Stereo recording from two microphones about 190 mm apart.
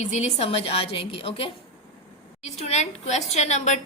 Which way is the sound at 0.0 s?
35° left (ahead or behind).